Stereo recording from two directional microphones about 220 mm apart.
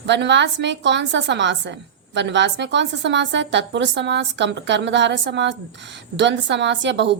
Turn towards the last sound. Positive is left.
turn(degrees=-55)  # may be behind; listen again after turning